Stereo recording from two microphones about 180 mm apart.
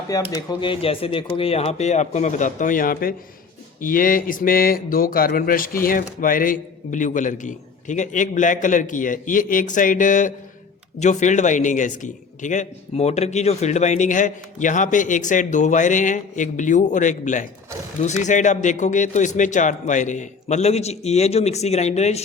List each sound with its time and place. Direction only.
0.1 s a man's voice: 20° left (ahead or behind); by 22.2 s 40° left (ahead or behind)